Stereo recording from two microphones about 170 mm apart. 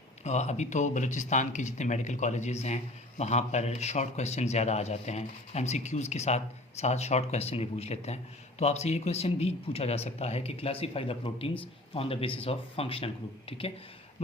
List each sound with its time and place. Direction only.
0.3 s speech: 40° left (ahead or behind)